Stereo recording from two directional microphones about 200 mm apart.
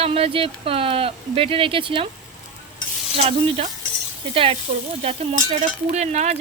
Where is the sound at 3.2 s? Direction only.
35° right (ahead or behind).